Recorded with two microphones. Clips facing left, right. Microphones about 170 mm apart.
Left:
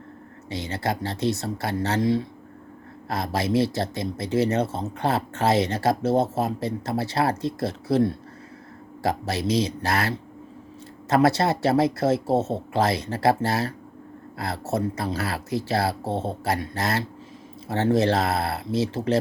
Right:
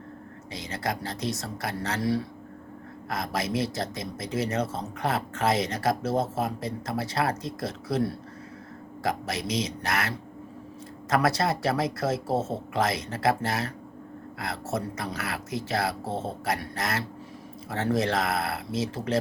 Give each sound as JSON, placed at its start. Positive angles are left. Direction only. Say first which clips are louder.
{"t": 0.5, "sound": "speech", "louder": "left 4 dB", "side_deg": 30}